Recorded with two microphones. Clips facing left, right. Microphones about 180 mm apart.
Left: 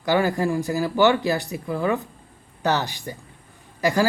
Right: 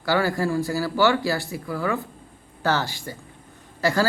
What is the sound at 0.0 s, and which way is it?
Speech, 20° left (ahead or behind).